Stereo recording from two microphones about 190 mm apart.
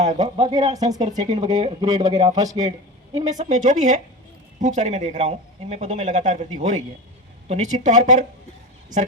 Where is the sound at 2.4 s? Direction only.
40° right (ahead or behind).